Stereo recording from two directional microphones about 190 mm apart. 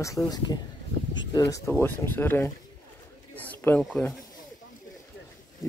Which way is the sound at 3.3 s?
10° left (ahead or behind).